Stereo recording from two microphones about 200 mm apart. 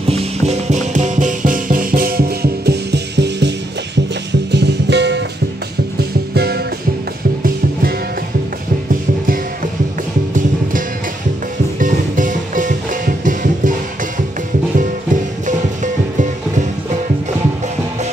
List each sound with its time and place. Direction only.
0.1 s music: 35° right (ahead or behind); by 6.6 s 55° right (ahead or behind)
11.8 s music: 40° right (ahead or behind)
15.4 s music: 40° right (ahead or behind)